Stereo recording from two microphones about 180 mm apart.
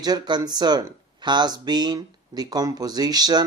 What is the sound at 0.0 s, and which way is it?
Speech, 25° right (ahead or behind).